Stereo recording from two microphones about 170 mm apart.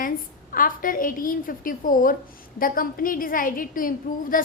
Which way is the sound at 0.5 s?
55° left (ahead or behind).